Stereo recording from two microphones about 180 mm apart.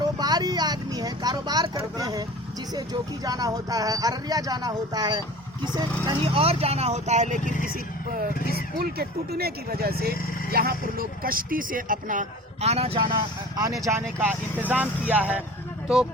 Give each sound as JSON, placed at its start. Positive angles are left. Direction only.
{"t": 0.0, "sound": "vehicle", "side_deg": -20}
{"t": 2.7, "sound": "speech", "side_deg": -20}
{"t": 8.8, "sound": "speech", "side_deg": -60}
{"t": 12.6, "sound": "speech", "side_deg": -35}
{"t": 14.2, "sound": "speech", "side_deg": -10}